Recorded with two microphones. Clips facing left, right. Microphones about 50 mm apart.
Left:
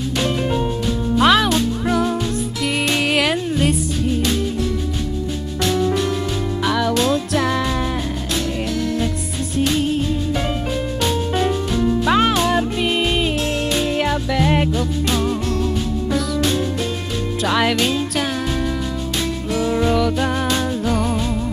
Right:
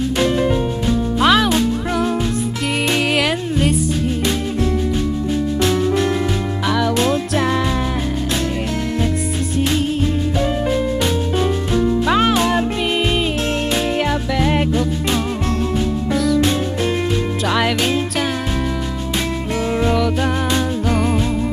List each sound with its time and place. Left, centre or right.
1.2 s music: centre
2.6 s music: centre
6.6 s music: centre
7.0 s music: right
7.4 s music: centre
12.1 s music: centre
13.4 s music: right
13.9 s music: centre
14.8 s music: centre
17.4 s music: centre
19.9 s music: centre
21.1 s music: centre